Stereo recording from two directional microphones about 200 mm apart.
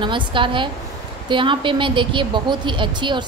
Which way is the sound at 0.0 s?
25° right (ahead or behind).